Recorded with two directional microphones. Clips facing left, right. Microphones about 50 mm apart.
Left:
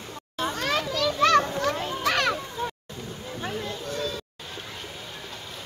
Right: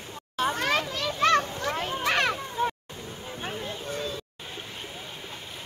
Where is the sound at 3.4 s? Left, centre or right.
Right.